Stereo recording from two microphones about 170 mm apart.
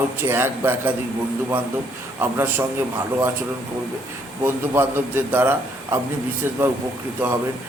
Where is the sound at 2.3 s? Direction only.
15° right (ahead or behind).